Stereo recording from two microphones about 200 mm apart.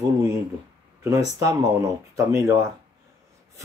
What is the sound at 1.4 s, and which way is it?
Speech, 15° right (ahead or behind).